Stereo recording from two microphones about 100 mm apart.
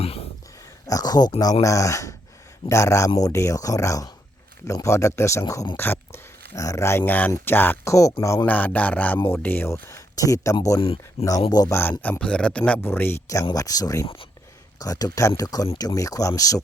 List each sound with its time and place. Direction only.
0.0 s a sound: 80° left
0.9 s speech: 40° left (ahead or behind); by 7.9 s 20° left (ahead or behind)
8.4 s a sound: 15° left (ahead or behind)
9.1 s speech: 25° left (ahead or behind)
10.8 s speech: 65° left (ahead or behind)
11.4 s speech: 40° left (ahead or behind)
11.7 s speech: 20° left (ahead or behind)
12.2 s a sound: 10° left (ahead or behind)
12.8 s speech: 20° left (ahead or behind)